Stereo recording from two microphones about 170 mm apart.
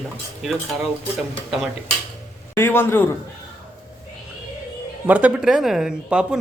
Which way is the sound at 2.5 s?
15° left (ahead or behind).